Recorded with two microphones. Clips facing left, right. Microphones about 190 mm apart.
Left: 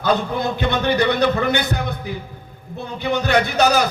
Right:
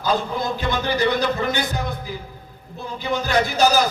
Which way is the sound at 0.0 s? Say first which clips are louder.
Left 3 dB; 65° left (ahead or behind).